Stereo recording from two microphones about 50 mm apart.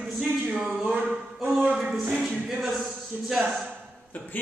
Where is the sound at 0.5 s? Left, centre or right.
Right.